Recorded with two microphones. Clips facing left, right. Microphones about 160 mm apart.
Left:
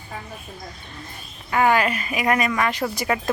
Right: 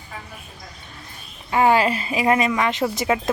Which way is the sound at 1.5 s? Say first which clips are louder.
Right 2 dB; 25° right (ahead or behind).